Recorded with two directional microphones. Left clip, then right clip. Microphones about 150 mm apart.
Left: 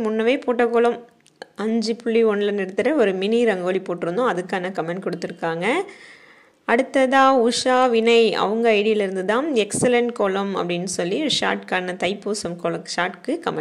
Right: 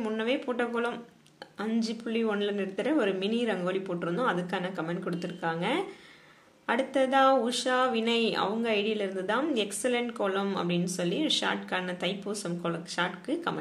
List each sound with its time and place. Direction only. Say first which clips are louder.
0.0 s speech: left 10 dB; 45° left (ahead or behind)